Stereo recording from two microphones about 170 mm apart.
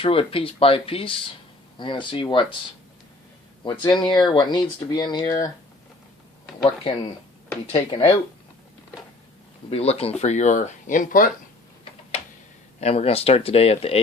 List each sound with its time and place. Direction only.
0.0 s speech: 35° left (ahead or behind)
3.9 s speech: 25° left (ahead or behind)
6.7 s speech: 35° left (ahead or behind)
9.6 s speech: 35° left (ahead or behind)
12.8 s speech: 35° left (ahead or behind)